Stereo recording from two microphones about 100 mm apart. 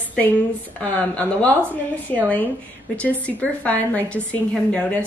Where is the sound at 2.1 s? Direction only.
15° left (ahead or behind).